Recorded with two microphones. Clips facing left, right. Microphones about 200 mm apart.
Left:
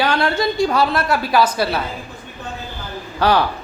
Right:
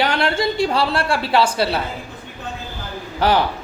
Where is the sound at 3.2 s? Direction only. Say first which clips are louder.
Left 1 dB; 20° right (ahead or behind).